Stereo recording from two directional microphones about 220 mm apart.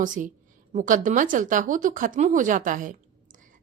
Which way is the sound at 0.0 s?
35° right (ahead or behind).